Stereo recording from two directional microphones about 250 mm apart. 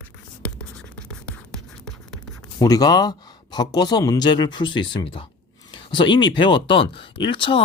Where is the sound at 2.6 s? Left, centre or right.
Centre.